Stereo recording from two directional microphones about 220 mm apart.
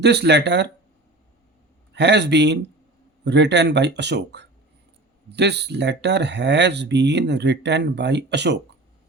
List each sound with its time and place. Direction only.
0.0 s speech: 50° right (ahead or behind)
1.9 s speech: 50° right (ahead or behind)